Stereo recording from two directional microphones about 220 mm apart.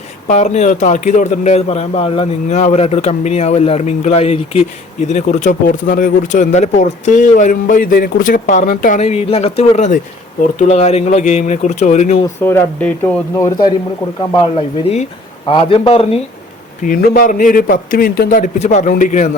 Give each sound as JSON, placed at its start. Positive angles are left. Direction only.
{"t": 0.3, "sound": "a man's voice", "side_deg": 30}
{"t": 12.2, "sound": "speech", "side_deg": 10}
{"t": 14.2, "sound": "a man's voice", "side_deg": 25}
{"t": 16.8, "sound": "speech", "side_deg": 40}